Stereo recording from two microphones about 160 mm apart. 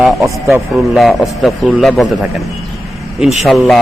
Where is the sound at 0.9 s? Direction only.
Centre (ahead or behind).